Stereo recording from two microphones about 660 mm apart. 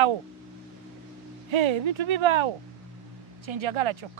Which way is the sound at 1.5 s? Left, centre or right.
Right.